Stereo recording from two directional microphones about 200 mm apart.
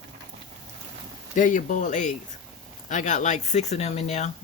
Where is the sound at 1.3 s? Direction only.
40° left (ahead or behind).